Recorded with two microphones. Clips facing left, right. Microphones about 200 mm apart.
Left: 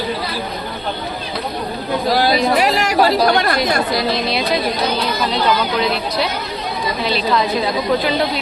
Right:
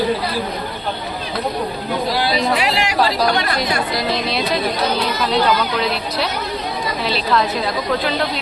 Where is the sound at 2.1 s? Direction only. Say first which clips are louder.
Left 5 dB; 45° left (ahead or behind).